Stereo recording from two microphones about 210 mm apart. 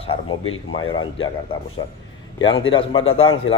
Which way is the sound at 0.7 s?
20° left (ahead or behind).